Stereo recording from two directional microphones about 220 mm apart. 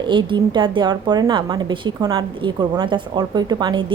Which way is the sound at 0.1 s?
20° right (ahead or behind).